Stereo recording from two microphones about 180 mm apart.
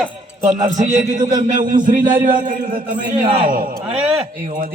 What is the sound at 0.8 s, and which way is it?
A man's voice, 45° right (ahead or behind).